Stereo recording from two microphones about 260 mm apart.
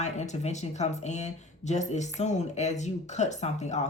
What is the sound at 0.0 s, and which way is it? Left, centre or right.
Speech, left.